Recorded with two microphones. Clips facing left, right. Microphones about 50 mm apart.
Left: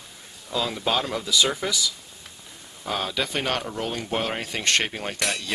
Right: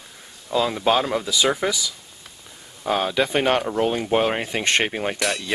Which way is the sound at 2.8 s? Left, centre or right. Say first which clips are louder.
Right 6 dB; centre.